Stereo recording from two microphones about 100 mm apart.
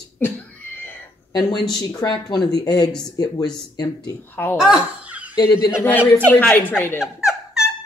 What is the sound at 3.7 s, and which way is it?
Speech, 45° left (ahead or behind).